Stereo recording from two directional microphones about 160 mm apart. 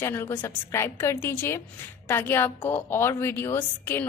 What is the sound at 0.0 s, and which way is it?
A woman's voice, 15° left (ahead or behind).